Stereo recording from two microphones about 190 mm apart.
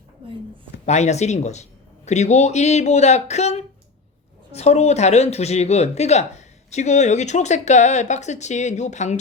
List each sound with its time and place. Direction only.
0.9 s speech: 35° left (ahead or behind)